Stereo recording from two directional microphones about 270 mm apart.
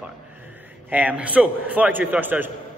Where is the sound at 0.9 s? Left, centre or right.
Centre.